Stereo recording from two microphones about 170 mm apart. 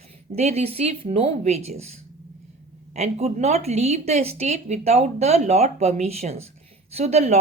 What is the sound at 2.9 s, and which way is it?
Speech, 40° right (ahead or behind).